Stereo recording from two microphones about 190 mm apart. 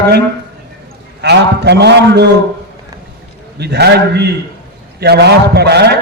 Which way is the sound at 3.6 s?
60° right (ahead or behind).